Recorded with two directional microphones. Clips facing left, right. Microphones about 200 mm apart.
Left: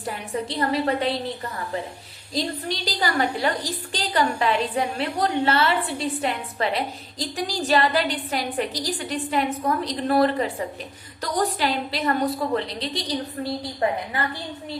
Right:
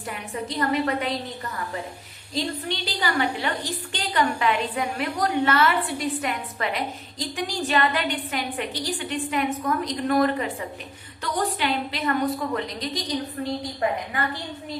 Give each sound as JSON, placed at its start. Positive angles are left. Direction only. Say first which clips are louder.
{"t": 0.0, "sound": "a woman's voice", "louder": "left 3 dB", "side_deg": 35}
{"t": 2.3, "sound": "a woman's voice", "louder": "left 1 dB", "side_deg": 40}